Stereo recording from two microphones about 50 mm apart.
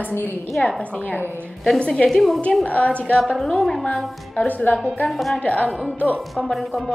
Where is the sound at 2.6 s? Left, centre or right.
Left.